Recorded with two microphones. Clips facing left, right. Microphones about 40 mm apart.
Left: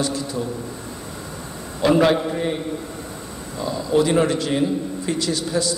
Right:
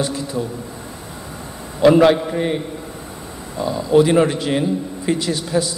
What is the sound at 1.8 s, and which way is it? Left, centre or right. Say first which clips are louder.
Speech: right 5 dB; centre.